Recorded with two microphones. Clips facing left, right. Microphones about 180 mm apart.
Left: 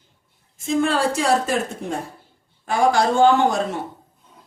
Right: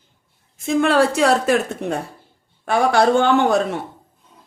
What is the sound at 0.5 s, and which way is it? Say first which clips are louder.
A woman's voice: right 4 dB; 65° right (ahead or behind).